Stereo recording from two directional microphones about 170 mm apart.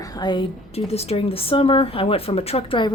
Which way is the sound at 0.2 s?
25° left (ahead or behind).